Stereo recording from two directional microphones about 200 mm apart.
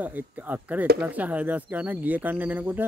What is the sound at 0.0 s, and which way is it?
Speech, 10° right (ahead or behind).